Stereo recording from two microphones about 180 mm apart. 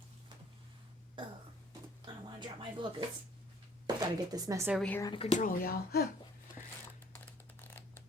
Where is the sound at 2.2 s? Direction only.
25° right (ahead or behind).